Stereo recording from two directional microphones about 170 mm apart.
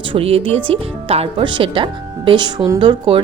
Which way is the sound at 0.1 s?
35° right (ahead or behind).